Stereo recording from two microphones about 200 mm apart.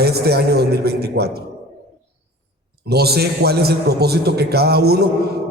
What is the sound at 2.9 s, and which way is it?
A man's voice, 55° right (ahead or behind).